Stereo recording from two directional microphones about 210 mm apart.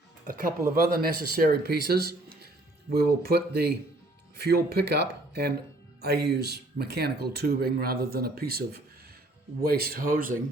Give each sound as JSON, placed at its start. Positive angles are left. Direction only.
{"t": 0.9, "sound": "speech", "side_deg": -45}